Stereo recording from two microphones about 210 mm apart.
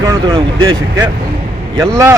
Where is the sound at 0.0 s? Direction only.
15° right (ahead or behind).